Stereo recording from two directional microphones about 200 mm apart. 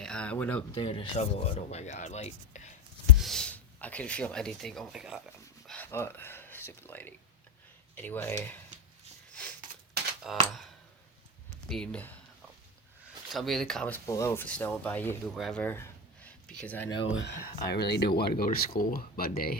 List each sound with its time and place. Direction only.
0.0 s speech: 5° left (ahead or behind)
0.7 s speech: 25° left (ahead or behind)
3.2 s speech: centre (ahead or behind)
5.6 s a sound: 10° left (ahead or behind)
7.9 s speech: 10° left (ahead or behind)
9.3 s sniff: 5° left (ahead or behind)
10.3 s speech: centre (ahead or behind)
11.7 s speech: 5° left (ahead or behind)
13.3 s speech: centre (ahead or behind)
16.2 s a sound: 5° left (ahead or behind)
17.1 s speech: 65° left (ahead or behind)
17.3 s speech: 50° left (ahead or behind)